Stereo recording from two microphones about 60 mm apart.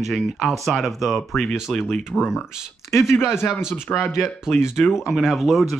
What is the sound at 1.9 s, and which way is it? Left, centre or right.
Speech, centre.